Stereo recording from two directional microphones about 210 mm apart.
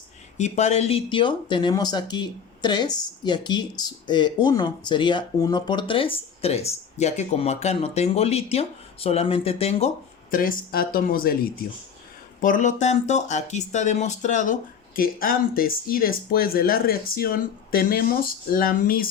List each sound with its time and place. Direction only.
0.3 s speech: 35° left (ahead or behind)
10.3 s speech: 40° left (ahead or behind)